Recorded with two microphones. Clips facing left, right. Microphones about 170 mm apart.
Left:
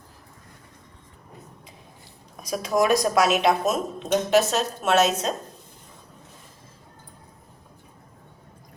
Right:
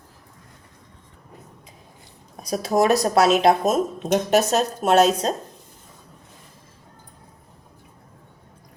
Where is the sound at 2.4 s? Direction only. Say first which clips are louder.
Right 3 dB; 35° right (ahead or behind).